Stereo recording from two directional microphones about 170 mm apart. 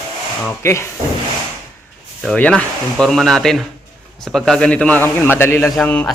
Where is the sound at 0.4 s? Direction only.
15° left (ahead or behind).